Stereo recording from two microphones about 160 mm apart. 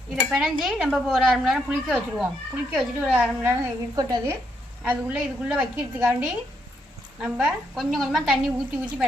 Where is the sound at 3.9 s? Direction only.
25° right (ahead or behind).